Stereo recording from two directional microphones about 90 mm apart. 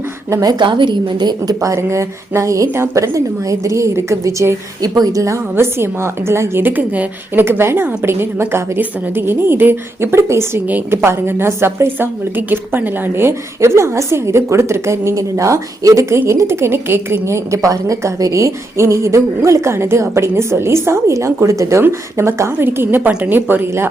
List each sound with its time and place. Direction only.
0.4 s a woman's voice: 60° right (ahead or behind)
1.6 s a woman's voice: 35° right (ahead or behind)